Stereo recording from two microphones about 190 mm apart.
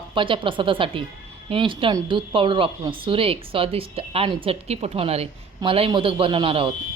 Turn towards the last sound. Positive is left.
turn(degrees=-30)  # may be behind; listen again after turning